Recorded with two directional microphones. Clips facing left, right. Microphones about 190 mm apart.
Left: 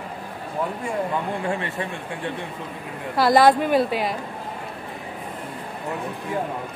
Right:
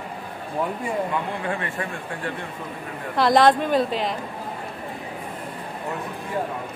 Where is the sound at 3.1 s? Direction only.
5° left (ahead or behind).